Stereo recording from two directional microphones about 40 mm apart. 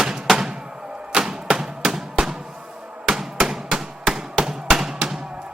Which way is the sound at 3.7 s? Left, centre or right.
Centre.